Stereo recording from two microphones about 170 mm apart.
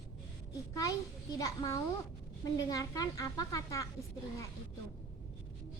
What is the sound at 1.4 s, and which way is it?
A woman's voice, 20° left (ahead or behind).